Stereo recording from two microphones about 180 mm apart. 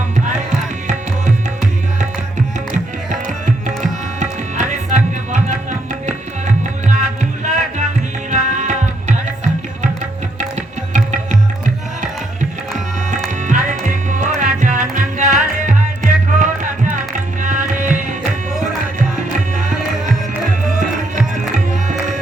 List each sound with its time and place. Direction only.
2.7 s music: 45° right (ahead or behind)
8.3 s tabla: 40° right (ahead or behind)
10.9 s tabla: 45° right (ahead or behind)
12.7 s music: 40° right (ahead or behind)
17.4 s tabla: 45° right (ahead or behind)
18.6 s music: 45° right (ahead or behind)
21.7 s music: 40° right (ahead or behind)